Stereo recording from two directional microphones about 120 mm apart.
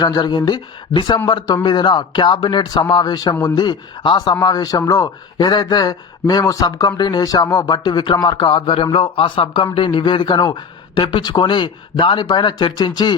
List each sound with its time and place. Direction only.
0.0 s speech: 35° left (ahead or behind)